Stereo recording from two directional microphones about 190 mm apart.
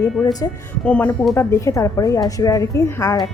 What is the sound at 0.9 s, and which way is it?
A woman's voice, 5° left (ahead or behind).